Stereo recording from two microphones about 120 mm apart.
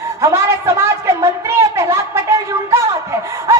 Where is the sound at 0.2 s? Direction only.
25° right (ahead or behind).